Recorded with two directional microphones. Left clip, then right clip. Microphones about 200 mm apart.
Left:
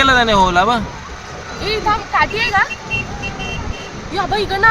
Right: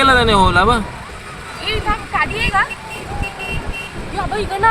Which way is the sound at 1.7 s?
20° left (ahead or behind).